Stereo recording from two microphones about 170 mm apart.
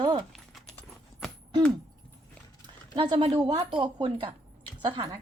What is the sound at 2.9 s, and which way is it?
Speech, 25° right (ahead or behind).